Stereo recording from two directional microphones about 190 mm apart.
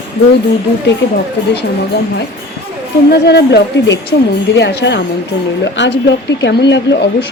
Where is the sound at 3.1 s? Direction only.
60° left (ahead or behind).